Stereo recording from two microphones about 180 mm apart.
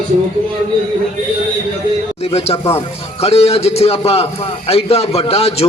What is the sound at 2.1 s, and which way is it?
A man's voice, 35° left (ahead or behind).